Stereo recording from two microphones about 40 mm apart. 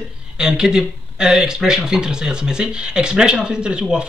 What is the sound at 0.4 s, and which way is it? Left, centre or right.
Speech, centre.